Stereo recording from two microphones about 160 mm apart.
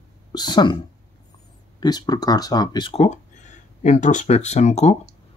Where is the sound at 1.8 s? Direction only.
25° left (ahead or behind).